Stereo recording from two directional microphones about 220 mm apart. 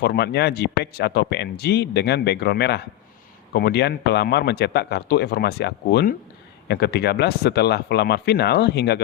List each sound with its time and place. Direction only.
0.0 s speech: 45° left (ahead or behind)